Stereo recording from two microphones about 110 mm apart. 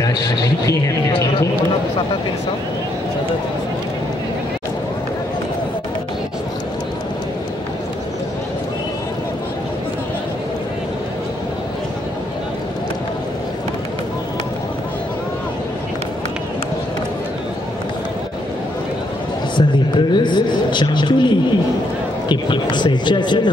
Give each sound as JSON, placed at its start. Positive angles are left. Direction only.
{"t": 0.7, "sound": "speech", "side_deg": 30}
{"t": 19.5, "sound": "a sound", "side_deg": 45}
{"t": 22.3, "sound": "speech", "side_deg": 45}